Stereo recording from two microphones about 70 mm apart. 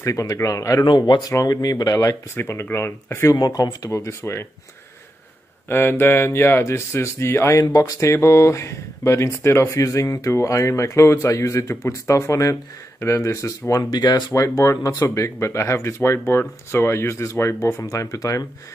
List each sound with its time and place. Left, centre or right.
0.0 s speech: left
0.8 s speech: left
1.5 s speech: left
2.0 s speech: left
3.3 s speech: left
4.0 s speech: left
5.7 s speech: left
7.6 s speech: left
13.9 s speech: left
14.3 s speech: left